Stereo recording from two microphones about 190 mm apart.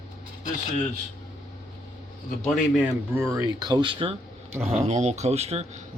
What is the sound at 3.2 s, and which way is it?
Speech, 15° right (ahead or behind).